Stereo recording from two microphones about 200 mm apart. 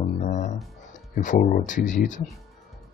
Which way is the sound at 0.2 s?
40° left (ahead or behind).